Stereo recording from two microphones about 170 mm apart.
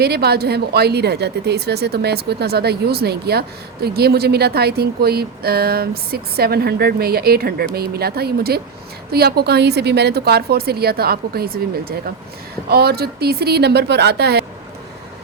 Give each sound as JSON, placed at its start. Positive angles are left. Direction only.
{"t": 0.0, "sound": "a woman's voice", "side_deg": -70}